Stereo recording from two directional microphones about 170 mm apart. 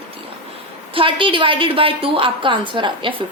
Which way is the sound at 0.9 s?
30° right (ahead or behind).